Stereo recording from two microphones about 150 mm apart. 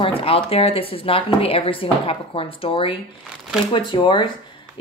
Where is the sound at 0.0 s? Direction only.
40° left (ahead or behind).